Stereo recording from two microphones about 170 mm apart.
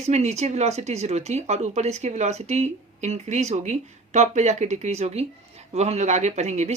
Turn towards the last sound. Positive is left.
turn(degrees=-40)  # may be behind; listen again after turning